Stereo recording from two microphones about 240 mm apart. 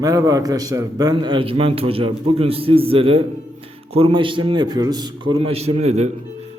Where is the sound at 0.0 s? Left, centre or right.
Centre.